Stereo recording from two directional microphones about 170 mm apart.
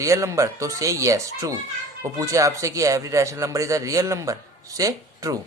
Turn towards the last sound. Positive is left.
turn(degrees=-20)  # may be behind; listen again after turning